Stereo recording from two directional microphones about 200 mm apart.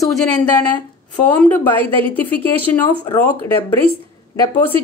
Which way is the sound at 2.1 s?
10° left (ahead or behind).